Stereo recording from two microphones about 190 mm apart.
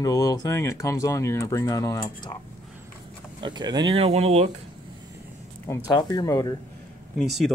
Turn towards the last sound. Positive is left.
turn(degrees=0)  # may be behind; listen again after turning